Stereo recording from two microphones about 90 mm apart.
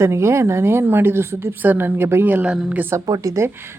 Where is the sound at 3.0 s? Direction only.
40° right (ahead or behind).